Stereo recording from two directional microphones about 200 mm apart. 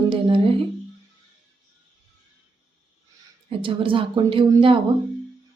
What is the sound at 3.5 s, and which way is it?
Speech, 25° right (ahead or behind).